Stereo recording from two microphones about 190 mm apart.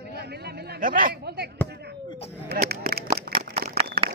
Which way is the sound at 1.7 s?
60° right (ahead or behind).